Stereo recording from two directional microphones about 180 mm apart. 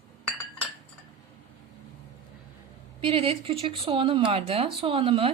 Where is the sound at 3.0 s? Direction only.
30° right (ahead or behind).